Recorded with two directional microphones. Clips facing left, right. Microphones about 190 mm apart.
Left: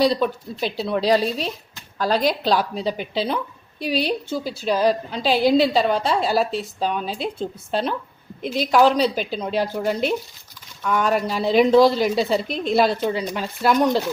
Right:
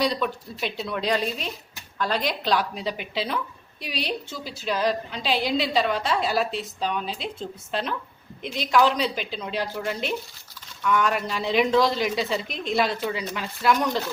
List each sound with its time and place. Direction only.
0.0 s a woman's voice: 35° left (ahead or behind)